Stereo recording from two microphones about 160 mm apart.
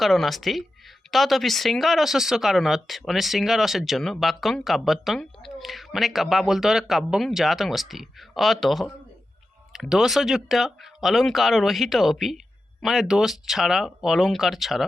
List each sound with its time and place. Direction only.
0.0 s speech: centre (ahead or behind)